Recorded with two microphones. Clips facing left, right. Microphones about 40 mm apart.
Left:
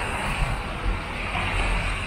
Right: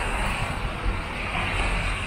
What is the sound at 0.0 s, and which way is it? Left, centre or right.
Vehicle, centre.